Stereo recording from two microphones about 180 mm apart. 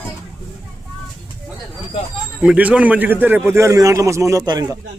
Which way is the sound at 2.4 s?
5° right (ahead or behind).